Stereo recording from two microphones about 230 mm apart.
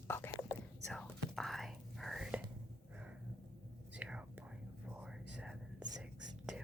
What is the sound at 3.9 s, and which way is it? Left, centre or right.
Whispering, centre.